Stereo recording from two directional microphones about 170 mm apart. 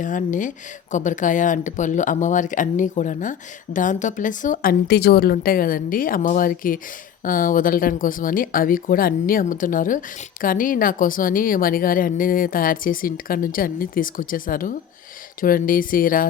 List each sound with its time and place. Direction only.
0.0 s a woman's voice: 50° left (ahead or behind)